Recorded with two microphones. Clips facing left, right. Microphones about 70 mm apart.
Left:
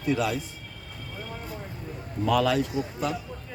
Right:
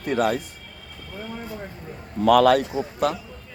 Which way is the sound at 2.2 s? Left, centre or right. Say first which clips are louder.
Right 8 dB; right.